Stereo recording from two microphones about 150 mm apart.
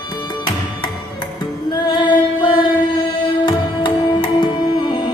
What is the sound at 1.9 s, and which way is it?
Music, 30° left (ahead or behind).